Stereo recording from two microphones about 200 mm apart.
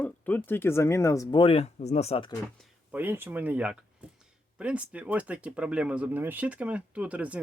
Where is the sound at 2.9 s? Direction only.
10° right (ahead or behind).